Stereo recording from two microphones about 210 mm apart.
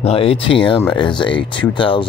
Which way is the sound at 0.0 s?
30° left (ahead or behind).